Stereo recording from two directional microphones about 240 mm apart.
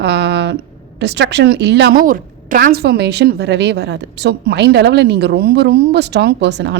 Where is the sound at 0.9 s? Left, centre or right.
Right.